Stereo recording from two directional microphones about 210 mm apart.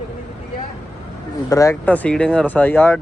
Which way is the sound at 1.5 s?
15° left (ahead or behind).